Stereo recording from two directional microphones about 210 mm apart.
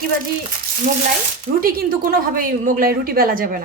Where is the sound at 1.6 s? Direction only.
45° right (ahead or behind).